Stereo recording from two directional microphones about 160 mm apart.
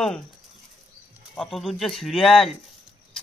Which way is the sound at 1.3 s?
Centre (ahead or behind).